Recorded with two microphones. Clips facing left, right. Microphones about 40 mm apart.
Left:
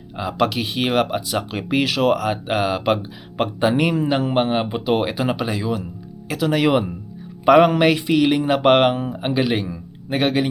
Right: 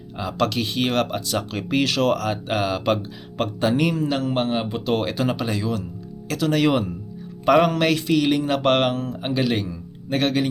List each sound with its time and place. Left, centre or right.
0.2 s speech: centre